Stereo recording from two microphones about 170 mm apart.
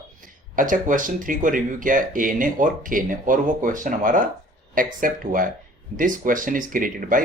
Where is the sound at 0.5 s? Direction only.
50° right (ahead or behind).